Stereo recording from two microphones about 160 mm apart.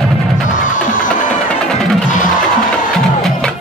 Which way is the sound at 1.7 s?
5° left (ahead or behind).